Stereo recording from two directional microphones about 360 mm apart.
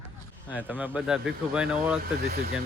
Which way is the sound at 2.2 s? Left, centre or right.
Right.